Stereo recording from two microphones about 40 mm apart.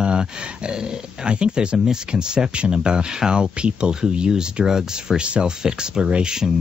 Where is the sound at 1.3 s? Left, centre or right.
Right.